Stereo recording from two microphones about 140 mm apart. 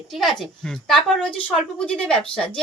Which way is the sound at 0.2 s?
Centre (ahead or behind).